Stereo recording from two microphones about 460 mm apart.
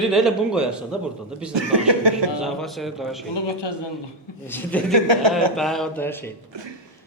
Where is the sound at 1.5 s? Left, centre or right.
Right.